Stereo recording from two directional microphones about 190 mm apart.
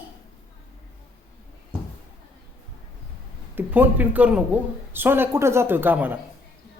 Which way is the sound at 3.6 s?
10° right (ahead or behind).